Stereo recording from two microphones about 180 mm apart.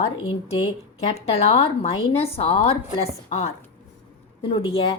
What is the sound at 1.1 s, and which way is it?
A woman's voice, 35° left (ahead or behind).